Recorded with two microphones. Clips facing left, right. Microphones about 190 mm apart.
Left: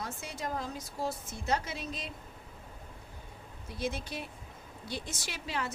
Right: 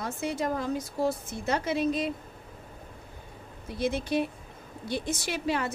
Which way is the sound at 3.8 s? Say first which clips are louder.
Right 9 dB; 65° right (ahead or behind).